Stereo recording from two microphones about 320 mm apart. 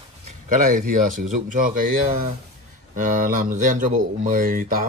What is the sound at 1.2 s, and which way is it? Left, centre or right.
Speech, right.